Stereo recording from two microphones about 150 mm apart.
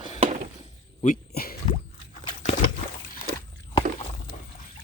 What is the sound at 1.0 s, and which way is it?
Speech, 75° left (ahead or behind).